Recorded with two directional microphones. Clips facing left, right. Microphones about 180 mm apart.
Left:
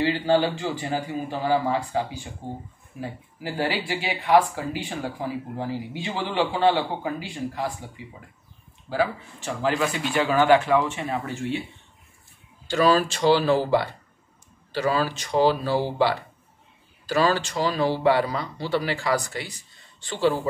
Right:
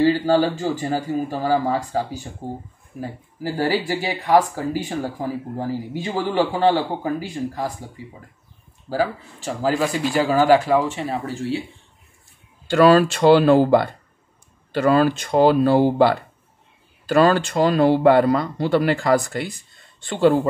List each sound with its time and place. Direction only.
0.0 s speech: 40° right (ahead or behind)
12.6 s speech: 60° right (ahead or behind)